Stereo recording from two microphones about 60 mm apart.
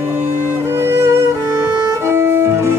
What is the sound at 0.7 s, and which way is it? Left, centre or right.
Violin, right.